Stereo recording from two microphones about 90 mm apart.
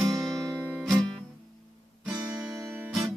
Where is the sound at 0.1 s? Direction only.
Centre (ahead or behind).